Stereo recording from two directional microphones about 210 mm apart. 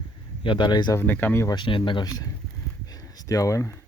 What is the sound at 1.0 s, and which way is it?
Speech, 10° left (ahead or behind).